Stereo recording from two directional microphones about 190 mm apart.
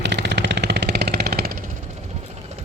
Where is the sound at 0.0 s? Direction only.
65° right (ahead or behind); by 1.7 s 50° right (ahead or behind).